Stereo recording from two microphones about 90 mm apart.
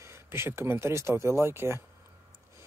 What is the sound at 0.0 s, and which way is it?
Speech, 30° right (ahead or behind).